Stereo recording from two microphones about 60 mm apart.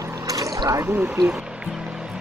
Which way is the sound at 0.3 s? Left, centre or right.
Right.